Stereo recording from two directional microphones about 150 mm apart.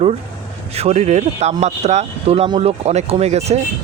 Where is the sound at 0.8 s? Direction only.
45° right (ahead or behind).